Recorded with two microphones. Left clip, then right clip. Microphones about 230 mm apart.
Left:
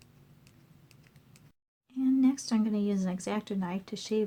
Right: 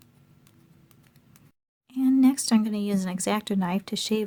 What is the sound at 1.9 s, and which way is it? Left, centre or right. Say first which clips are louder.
Speech: right 6 dB; right.